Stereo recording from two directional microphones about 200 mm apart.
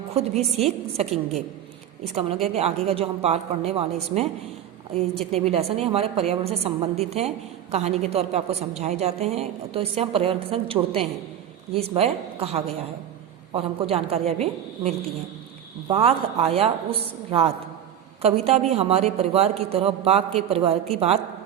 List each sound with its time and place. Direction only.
0.1 s a woman's voice: 30° right (ahead or behind)
2.1 s a woman's voice: 30° right (ahead or behind)